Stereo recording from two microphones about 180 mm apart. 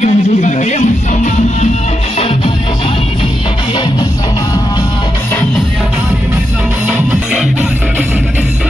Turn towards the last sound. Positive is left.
turn(degrees=-10)  # may be behind; listen again after turning